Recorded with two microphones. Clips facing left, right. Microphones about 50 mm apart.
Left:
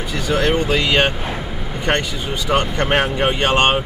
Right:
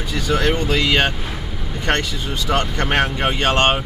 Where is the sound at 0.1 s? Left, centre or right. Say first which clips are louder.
Left 1 dB; centre.